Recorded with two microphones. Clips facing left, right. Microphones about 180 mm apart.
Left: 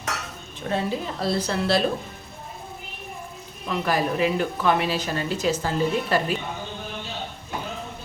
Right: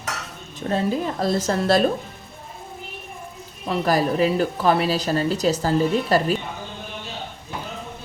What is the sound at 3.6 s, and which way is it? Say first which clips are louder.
Speech: right 4 dB; 40° right (ahead or behind).